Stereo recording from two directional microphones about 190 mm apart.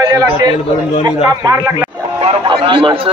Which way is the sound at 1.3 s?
20° right (ahead or behind).